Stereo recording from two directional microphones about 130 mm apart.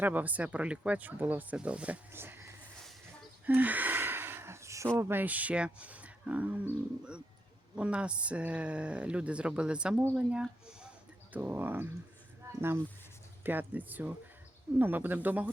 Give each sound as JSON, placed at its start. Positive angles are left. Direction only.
{"t": 0.0, "sound": "speech", "side_deg": -15}
{"t": 3.4, "sound": "gasp", "side_deg": -15}
{"t": 4.9, "sound": "speech", "side_deg": -20}
{"t": 7.8, "sound": "speech", "side_deg": -10}